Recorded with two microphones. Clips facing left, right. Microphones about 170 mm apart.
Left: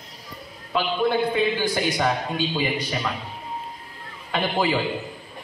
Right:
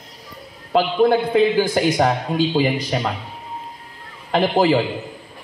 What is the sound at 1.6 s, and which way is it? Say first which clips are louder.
A man's voice: right 6 dB; 45° right (ahead or behind).